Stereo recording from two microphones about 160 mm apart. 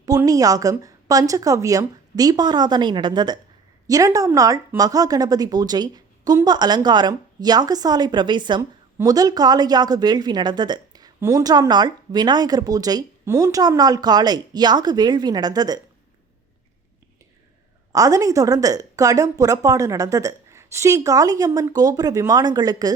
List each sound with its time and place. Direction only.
0.2 s speech: 20° right (ahead or behind)
17.9 s speech: 20° right (ahead or behind)